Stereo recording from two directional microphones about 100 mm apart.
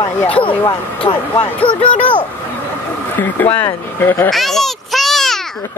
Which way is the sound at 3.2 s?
20° left (ahead or behind).